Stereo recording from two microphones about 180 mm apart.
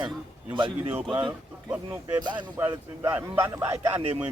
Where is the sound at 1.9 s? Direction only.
25° right (ahead or behind).